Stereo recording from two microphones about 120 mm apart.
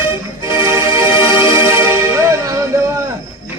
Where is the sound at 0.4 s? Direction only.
25° right (ahead or behind).